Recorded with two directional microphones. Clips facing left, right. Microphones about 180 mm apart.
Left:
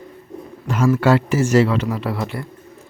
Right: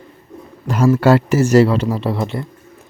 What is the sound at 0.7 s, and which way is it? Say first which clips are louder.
A man's voice: right 3 dB; 40° right (ahead or behind).